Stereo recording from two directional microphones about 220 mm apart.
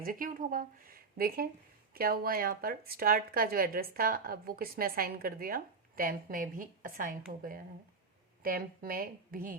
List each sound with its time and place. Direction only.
0.0 s a woman's voice: 40° right (ahead or behind)